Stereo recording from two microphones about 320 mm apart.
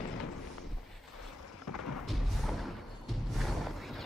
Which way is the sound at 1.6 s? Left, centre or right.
Left.